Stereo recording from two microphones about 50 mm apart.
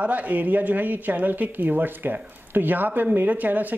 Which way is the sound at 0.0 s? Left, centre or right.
Right.